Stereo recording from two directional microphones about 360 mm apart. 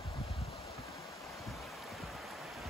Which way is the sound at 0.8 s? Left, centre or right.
Centre.